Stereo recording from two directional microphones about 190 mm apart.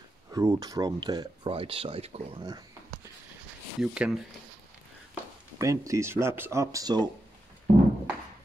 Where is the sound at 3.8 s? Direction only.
5° right (ahead or behind).